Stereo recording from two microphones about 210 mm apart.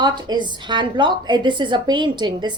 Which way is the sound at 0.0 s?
20° right (ahead or behind).